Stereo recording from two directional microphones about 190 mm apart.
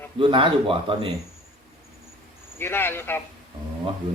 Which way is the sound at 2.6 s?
10° left (ahead or behind).